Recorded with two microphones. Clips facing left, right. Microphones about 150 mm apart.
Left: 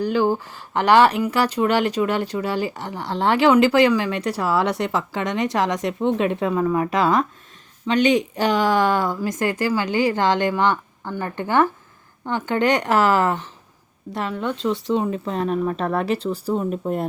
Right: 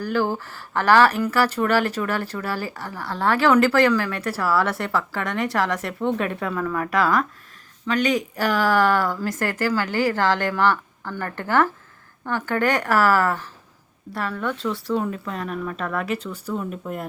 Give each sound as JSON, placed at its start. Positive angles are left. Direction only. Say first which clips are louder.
{"t": 0.0, "sound": "a woman's voice", "louder": "left 4 dB", "side_deg": 20}